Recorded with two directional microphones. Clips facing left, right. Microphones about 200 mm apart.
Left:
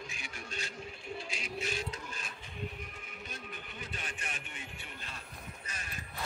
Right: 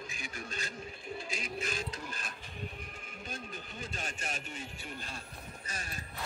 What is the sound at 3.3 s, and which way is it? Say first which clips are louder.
Music: right 4 dB; 45° right (ahead or behind).